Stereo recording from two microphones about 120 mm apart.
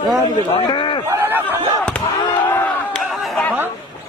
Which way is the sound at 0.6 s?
45° left (ahead or behind).